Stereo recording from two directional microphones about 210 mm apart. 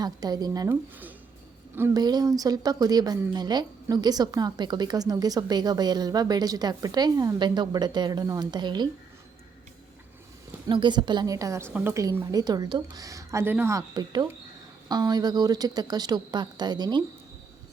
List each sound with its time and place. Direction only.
0.0 s a woman's voice: 20° right (ahead or behind)
10.7 s a woman's voice: 20° right (ahead or behind)